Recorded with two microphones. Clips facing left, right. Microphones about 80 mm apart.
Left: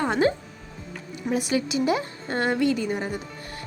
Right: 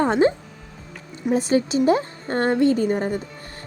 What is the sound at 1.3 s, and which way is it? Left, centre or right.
A woman's voice, right.